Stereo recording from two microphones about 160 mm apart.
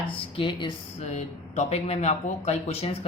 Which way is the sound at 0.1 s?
30° left (ahead or behind).